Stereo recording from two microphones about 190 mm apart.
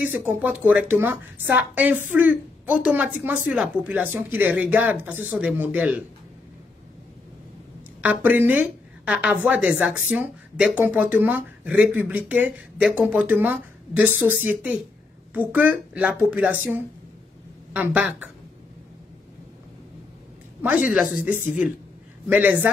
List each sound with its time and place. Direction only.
0.3 s a woman's voice: 5° right (ahead or behind)
8.0 s a woman's voice: 10° right (ahead or behind)
20.6 s a woman's voice: 10° right (ahead or behind)